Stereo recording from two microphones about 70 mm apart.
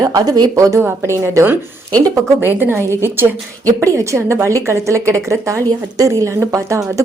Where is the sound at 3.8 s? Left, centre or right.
Right.